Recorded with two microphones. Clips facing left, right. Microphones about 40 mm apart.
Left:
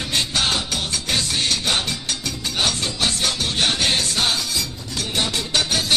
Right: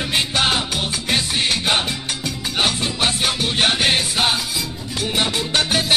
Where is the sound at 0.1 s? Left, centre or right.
Centre.